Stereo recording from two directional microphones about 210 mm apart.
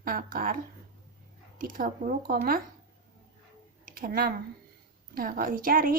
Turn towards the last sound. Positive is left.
turn(degrees=-40)  # may be behind; listen again after turning